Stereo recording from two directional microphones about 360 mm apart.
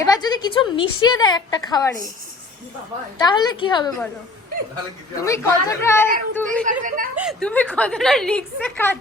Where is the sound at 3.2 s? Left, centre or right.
Centre.